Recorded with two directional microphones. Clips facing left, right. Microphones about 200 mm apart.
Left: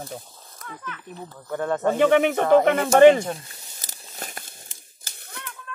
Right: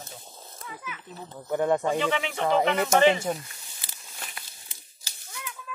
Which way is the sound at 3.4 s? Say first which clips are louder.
Left 3 dB; 40° left (ahead or behind).